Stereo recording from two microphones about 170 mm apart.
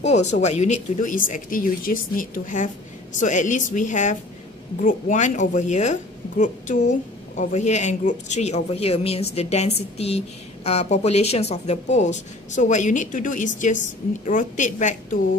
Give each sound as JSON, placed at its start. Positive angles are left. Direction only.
{"t": 0.0, "sound": "speech", "side_deg": 40}